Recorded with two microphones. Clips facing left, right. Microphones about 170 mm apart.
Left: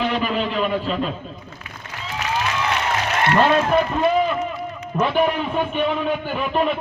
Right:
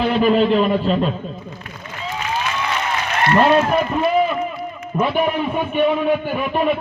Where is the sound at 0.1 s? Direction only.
40° right (ahead or behind).